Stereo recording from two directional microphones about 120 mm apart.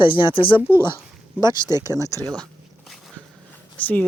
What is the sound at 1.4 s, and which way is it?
Speech, 35° left (ahead or behind).